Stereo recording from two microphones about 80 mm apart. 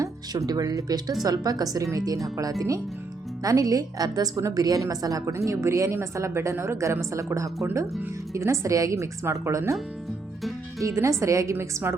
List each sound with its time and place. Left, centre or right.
0.0 s a woman's voice: right
10.8 s a woman's voice: right